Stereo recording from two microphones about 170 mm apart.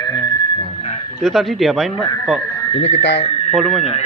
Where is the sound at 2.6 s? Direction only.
25° left (ahead or behind).